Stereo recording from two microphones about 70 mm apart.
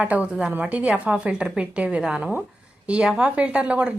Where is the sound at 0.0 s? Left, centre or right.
Centre.